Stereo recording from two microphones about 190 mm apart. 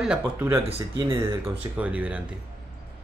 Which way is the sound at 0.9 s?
25° right (ahead or behind).